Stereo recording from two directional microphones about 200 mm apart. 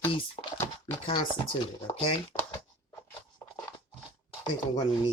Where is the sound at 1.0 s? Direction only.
25° left (ahead or behind).